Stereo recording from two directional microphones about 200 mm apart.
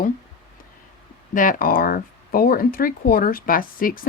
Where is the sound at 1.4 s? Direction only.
45° left (ahead or behind).